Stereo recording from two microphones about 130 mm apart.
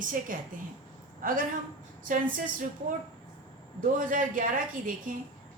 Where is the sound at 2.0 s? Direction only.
90° right.